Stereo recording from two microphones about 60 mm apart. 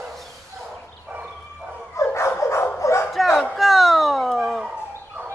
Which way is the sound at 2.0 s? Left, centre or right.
Left.